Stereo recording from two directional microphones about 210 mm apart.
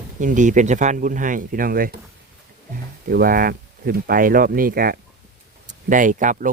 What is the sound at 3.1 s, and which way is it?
Speech, 45° right (ahead or behind).